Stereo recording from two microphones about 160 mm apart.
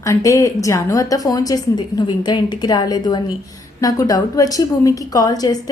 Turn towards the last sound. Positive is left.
turn(degrees=25)  # may be behind; listen again after turning